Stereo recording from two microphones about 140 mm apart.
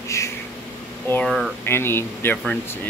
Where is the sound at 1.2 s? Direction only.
Centre (ahead or behind).